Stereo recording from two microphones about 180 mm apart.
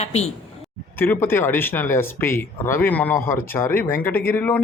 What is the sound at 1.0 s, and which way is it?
Speech, 10° left (ahead or behind).